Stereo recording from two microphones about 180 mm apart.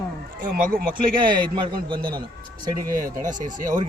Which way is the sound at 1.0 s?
25° right (ahead or behind).